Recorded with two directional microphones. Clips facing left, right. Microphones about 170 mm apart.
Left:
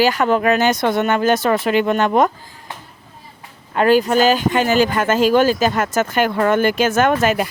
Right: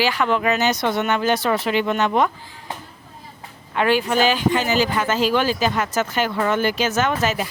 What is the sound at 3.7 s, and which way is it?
Speech, 40° left (ahead or behind).